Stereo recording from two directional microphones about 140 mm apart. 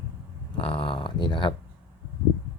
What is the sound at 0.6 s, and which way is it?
Speech, 40° left (ahead or behind).